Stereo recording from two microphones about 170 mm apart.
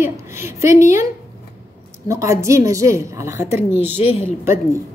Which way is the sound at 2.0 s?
15° right (ahead or behind).